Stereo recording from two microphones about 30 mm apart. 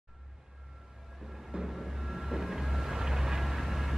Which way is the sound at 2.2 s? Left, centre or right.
Centre.